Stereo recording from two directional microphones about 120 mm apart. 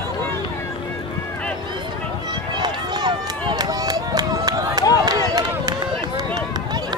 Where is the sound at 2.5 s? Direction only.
40° right (ahead or behind).